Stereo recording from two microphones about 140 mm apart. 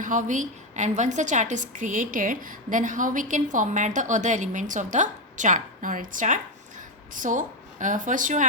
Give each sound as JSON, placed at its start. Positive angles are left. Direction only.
{"t": 0.0, "sound": "a woman's voice", "side_deg": -65}